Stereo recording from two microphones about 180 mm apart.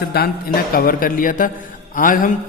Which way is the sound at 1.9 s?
50° left (ahead or behind).